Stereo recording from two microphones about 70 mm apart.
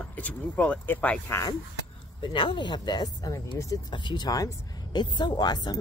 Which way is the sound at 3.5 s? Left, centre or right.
Left.